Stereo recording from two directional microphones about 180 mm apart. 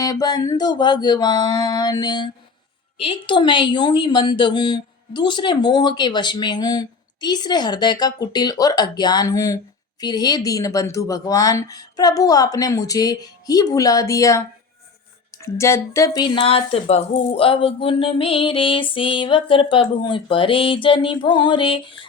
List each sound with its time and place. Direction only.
0.0 s speech: 20° left (ahead or behind)